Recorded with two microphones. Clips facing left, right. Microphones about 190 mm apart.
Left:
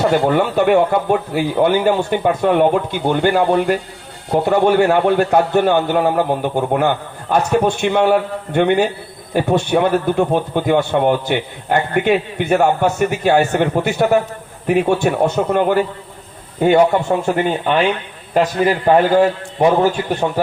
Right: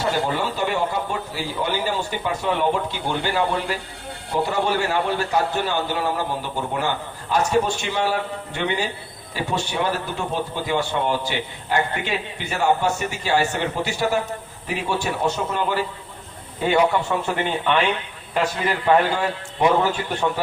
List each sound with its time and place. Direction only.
0.0 s a man's voice: 60° left (ahead or behind); by 20.4 s 45° left (ahead or behind)